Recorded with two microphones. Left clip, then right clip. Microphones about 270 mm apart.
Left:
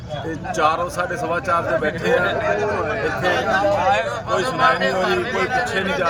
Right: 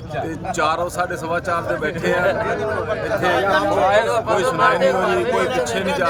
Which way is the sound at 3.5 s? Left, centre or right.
Right.